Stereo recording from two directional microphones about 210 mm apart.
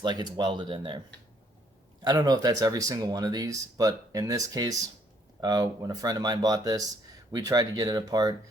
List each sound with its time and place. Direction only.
0.0 s speech: 20° right (ahead or behind)